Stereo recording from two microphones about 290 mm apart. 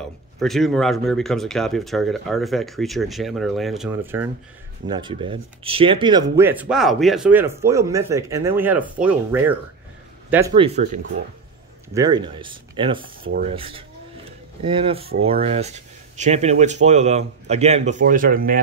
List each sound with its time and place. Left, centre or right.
0.4 s speech: centre
10.8 s speech: right
11.9 s speech: centre; by 18.6 s right